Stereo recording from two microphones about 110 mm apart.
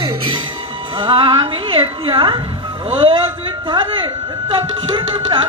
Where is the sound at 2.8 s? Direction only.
55° right (ahead or behind).